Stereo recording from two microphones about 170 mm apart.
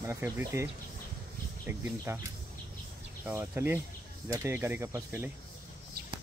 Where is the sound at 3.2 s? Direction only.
10° right (ahead or behind).